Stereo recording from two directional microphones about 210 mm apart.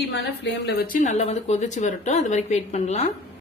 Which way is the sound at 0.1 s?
50° left (ahead or behind).